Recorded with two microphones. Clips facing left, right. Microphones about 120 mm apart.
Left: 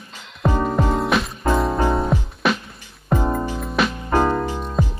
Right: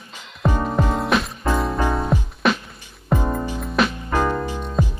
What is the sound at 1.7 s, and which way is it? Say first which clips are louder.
Music: left 2 dB; 25° left (ahead or behind).